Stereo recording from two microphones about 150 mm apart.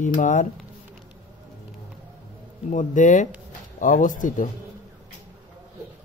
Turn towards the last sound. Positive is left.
turn(degrees=60)  # may be behind; listen again after turning